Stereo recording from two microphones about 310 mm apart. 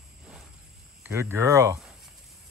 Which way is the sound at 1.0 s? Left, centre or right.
Centre.